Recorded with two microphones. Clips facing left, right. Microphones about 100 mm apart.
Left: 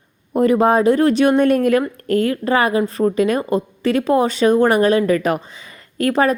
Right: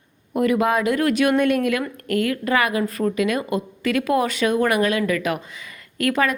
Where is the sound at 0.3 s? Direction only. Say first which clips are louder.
Left 5 dB; 35° left (ahead or behind).